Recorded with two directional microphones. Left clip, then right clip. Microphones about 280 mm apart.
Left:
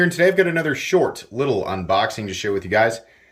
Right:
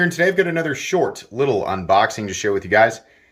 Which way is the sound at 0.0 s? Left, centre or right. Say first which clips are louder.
Left 1 dB; centre.